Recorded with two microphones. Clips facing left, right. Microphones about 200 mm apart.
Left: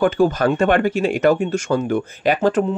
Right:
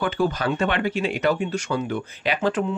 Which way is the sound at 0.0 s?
50° left (ahead or behind).